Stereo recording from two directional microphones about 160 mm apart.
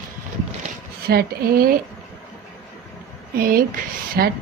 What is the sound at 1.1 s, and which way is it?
Speech, 70° right (ahead or behind).